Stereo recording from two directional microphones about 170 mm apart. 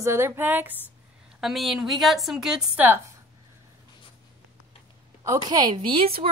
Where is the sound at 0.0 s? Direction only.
15° right (ahead or behind).